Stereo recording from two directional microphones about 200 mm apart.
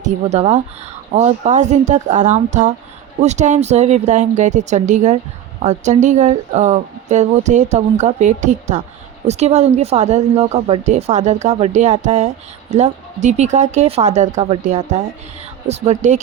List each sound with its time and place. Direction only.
0.3 s speech: 35° right (ahead or behind)